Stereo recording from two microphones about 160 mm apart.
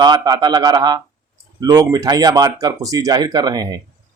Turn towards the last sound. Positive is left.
turn(degrees=-25)  # may be behind; listen again after turning